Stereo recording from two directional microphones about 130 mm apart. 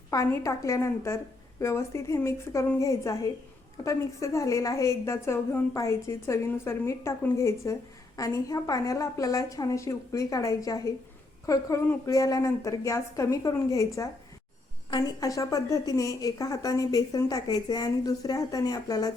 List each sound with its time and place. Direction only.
0.1 s a woman's voice: 25° left (ahead or behind)